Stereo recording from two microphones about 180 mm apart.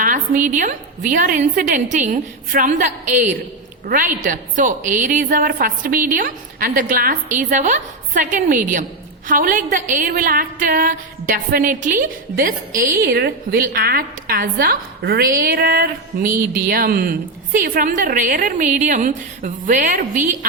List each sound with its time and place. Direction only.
0.0 s a woman's voice: 50° right (ahead or behind)